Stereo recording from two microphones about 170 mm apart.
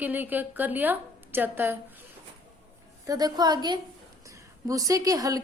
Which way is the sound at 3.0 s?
20° right (ahead or behind).